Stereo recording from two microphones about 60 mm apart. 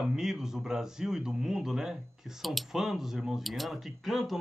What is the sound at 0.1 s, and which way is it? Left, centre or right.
Speech, centre.